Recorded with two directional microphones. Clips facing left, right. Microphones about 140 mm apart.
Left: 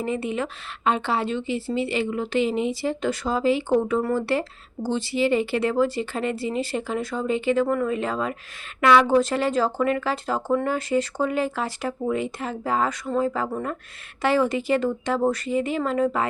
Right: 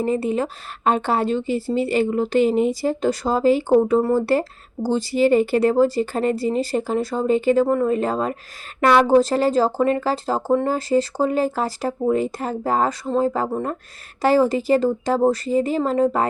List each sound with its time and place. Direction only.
0.0 s speech: 40° right (ahead or behind)